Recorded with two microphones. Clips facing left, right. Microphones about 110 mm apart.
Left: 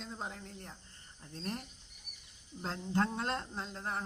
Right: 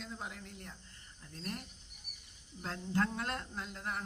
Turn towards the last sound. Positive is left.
turn(degrees=30)  # may be behind; listen again after turning